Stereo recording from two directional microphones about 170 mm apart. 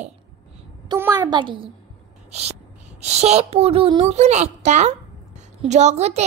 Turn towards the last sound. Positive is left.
turn(degrees=-40)  # may be behind; listen again after turning